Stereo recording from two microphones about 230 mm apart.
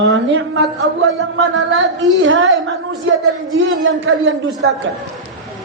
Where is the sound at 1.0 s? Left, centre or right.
Right.